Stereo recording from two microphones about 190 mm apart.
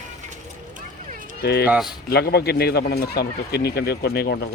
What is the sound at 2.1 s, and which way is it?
Speech, 55° left (ahead or behind).